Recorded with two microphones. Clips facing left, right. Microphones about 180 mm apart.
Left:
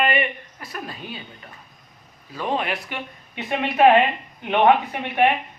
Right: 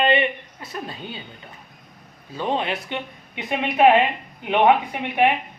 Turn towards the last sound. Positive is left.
turn(degrees=-15)  # may be behind; listen again after turning